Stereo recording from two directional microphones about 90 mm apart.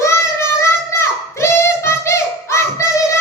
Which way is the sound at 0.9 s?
30° left (ahead or behind).